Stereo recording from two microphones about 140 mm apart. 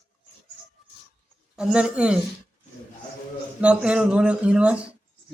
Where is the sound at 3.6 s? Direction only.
10° right (ahead or behind).